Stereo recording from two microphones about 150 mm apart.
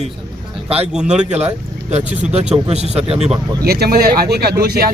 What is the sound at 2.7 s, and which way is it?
Speech, 45° right (ahead or behind).